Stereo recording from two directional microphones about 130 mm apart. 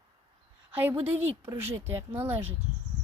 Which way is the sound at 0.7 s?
15° right (ahead or behind).